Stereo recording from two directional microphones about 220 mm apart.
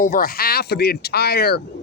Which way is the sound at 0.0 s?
40° left (ahead or behind).